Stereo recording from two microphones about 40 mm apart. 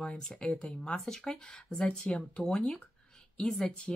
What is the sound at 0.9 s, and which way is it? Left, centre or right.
Speech, centre.